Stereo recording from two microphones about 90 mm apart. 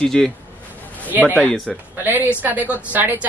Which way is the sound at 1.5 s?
5° left (ahead or behind).